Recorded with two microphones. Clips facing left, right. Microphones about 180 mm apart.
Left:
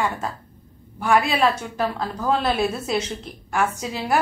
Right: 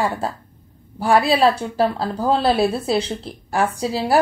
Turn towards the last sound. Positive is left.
turn(degrees=-35)  # may be behind; listen again after turning